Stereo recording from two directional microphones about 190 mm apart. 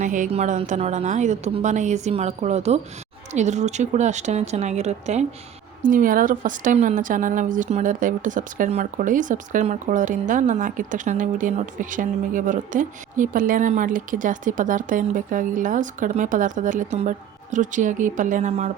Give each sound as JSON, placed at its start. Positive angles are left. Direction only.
{"t": 0.0, "sound": "a woman's voice", "side_deg": -40}